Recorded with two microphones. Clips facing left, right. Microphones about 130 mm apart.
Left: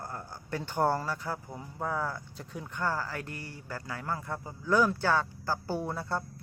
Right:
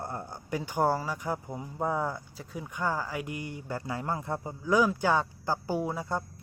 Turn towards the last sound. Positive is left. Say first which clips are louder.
# right 2 dB
turn(degrees=-15)  # may be behind; listen again after turning